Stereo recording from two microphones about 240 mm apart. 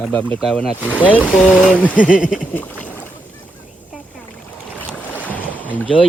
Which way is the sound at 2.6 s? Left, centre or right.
Centre.